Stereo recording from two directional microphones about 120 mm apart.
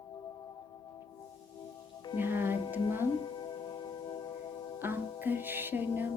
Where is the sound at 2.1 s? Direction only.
15° right (ahead or behind).